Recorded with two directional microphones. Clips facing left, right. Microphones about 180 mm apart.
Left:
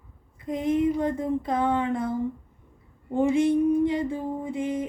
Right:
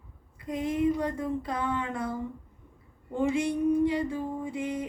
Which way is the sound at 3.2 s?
25° left (ahead or behind).